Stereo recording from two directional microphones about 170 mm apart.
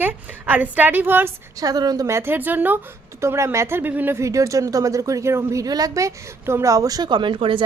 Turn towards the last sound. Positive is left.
turn(degrees=-30)  # may be behind; listen again after turning